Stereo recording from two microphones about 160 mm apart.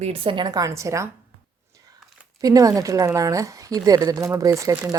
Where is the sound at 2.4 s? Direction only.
20° right (ahead or behind).